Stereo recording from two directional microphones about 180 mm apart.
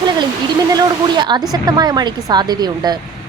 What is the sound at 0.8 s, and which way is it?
Speech, 25° right (ahead or behind).